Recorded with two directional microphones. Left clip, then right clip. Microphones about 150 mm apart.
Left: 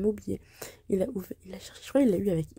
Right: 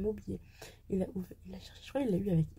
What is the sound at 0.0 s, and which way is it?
Speech, 40° left (ahead or behind).